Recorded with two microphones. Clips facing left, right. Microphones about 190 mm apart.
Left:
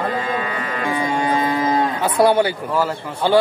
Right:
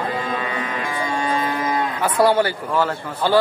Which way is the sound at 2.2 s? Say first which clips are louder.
Left 2 dB; 15° left (ahead or behind).